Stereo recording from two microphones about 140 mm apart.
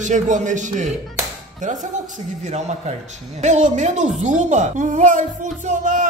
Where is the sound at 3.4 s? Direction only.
60° right (ahead or behind).